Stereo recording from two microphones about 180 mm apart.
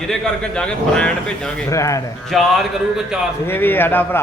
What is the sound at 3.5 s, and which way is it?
Speech, 10° left (ahead or behind).